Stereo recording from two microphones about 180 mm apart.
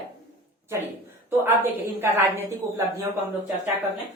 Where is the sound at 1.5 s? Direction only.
10° right (ahead or behind).